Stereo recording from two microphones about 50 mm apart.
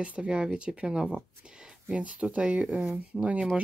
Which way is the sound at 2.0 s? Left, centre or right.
Right.